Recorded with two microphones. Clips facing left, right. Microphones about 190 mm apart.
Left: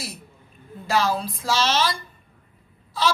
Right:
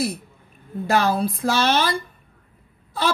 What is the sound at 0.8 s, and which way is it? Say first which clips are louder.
A child's voice: right 3 dB; 60° right (ahead or behind).